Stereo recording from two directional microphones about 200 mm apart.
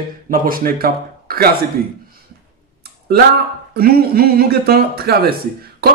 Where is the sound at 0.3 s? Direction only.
45° right (ahead or behind).